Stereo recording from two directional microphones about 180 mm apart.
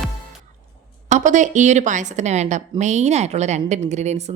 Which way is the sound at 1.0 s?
40° right (ahead or behind).